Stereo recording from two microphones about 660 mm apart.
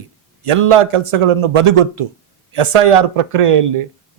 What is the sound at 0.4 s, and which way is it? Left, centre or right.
Speech, right.